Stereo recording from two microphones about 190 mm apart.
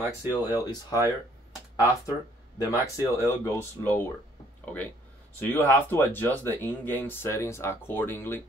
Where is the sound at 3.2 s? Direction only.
15° left (ahead or behind).